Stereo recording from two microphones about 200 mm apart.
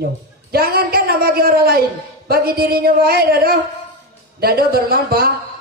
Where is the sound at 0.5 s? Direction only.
50° right (ahead or behind).